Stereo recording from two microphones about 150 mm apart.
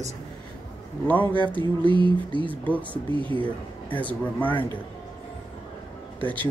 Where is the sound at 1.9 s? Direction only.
35° right (ahead or behind).